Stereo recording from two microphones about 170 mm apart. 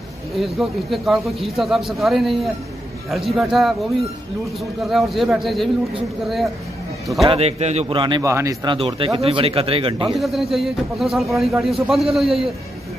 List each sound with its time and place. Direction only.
0.4 s a man's voice: centre (ahead or behind)
4.8 s a man's voice: centre (ahead or behind)
7.2 s a man's voice: 40° right (ahead or behind); by 8.7 s 20° right (ahead or behind)
8.7 s speech: 35° right (ahead or behind)
10.0 s a man's voice: centre (ahead or behind)